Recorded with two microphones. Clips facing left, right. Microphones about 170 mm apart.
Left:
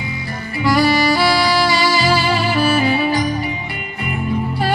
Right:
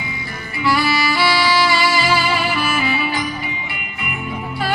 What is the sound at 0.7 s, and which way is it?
Music, 40° left (ahead or behind).